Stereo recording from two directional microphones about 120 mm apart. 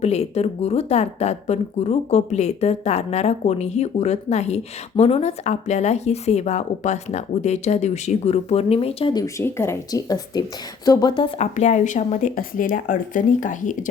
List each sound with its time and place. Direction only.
0.0 s speech: 60° left (ahead or behind)
5.5 s speech: 70° left (ahead or behind); by 9.1 s 55° left (ahead or behind)
9.1 s speech: 25° left (ahead or behind)
9.9 s speech: 35° left (ahead or behind)
11.3 s speech: 75° left (ahead or behind)